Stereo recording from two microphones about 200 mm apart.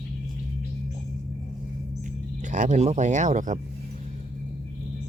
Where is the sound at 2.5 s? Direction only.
40° right (ahead or behind).